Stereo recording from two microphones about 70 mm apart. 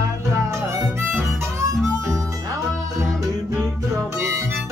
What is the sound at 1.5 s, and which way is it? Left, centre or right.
Harmonica, right.